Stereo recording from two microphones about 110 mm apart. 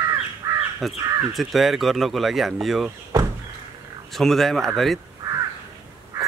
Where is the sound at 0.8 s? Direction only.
Centre (ahead or behind).